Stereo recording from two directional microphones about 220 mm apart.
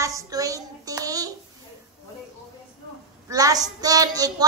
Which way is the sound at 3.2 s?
15° right (ahead or behind).